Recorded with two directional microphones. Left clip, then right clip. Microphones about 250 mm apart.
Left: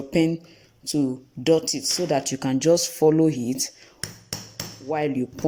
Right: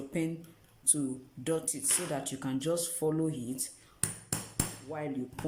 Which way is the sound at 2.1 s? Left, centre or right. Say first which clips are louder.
Left 12 dB; left.